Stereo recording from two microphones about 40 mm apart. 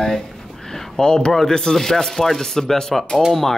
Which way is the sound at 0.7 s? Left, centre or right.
Centre.